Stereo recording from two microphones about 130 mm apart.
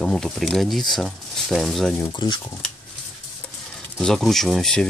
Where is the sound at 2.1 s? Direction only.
40° left (ahead or behind).